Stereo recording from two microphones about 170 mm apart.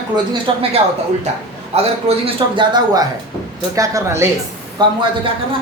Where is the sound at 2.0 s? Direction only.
30° right (ahead or behind).